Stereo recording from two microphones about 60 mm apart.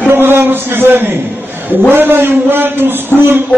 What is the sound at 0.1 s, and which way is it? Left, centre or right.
A man's voice, right.